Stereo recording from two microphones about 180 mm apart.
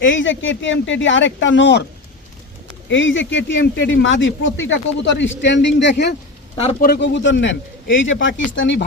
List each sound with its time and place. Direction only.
0.0 s speech: 90° left
2.9 s speech: 90° left